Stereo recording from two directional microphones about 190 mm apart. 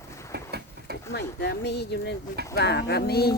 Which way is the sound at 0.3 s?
60° right (ahead or behind).